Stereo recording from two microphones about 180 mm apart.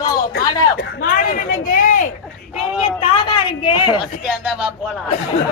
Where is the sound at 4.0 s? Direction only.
5° right (ahead or behind).